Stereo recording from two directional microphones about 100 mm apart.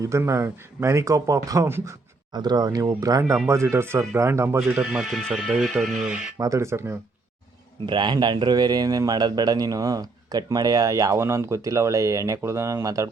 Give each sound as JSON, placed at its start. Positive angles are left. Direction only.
{"t": 0.0, "sound": "speech", "side_deg": -30}
{"t": 2.3, "sound": "speech", "side_deg": -45}
{"t": 4.8, "sound": "speech", "side_deg": -5}
{"t": 6.4, "sound": "speech", "side_deg": -30}
{"t": 7.9, "sound": "speech", "side_deg": -50}